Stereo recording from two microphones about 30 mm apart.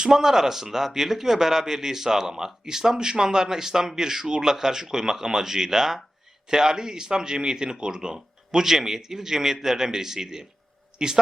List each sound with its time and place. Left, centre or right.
0.0 s speech: centre
8.6 s speech: centre